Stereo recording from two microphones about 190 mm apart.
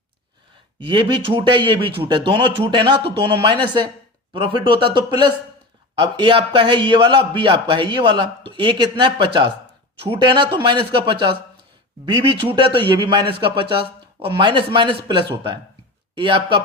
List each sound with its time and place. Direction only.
0.8 s a man's voice: 25° right (ahead or behind)